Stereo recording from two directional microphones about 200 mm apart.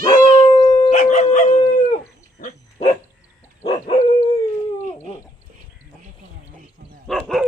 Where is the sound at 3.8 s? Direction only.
40° left (ahead or behind).